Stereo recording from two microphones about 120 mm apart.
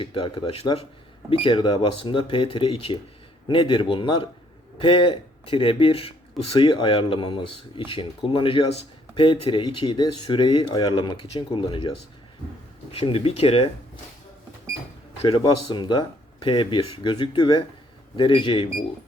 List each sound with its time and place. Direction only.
0.0 s speech: 40° left (ahead or behind)
6.6 s speech: 40° left (ahead or behind)
15.3 s speech: 40° left (ahead or behind)